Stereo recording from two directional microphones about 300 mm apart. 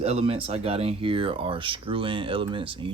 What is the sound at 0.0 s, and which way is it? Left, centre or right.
Speech, centre.